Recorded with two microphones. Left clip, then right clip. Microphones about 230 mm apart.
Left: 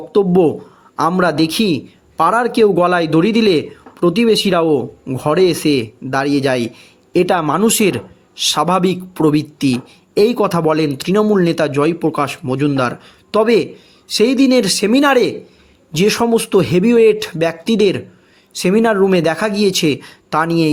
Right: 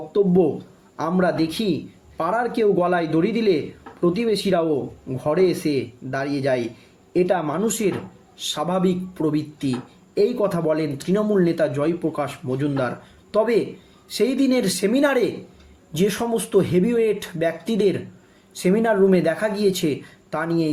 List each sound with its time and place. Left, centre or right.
0.1 s speech: left